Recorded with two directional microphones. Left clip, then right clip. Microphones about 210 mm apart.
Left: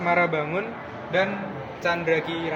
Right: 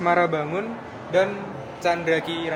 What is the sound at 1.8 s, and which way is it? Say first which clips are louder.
Speech: right 1 dB; 45° right (ahead or behind).